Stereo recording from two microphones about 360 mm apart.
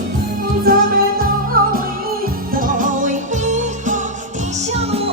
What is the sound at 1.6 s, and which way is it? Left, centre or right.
Music, right.